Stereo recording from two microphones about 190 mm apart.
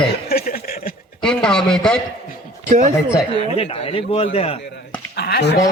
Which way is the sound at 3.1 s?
30° left (ahead or behind).